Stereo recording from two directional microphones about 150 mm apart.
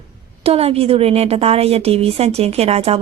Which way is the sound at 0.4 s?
40° right (ahead or behind).